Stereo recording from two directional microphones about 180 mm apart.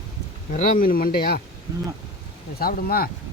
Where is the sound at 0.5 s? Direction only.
50° left (ahead or behind).